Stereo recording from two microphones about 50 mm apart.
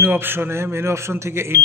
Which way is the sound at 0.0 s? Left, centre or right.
Right.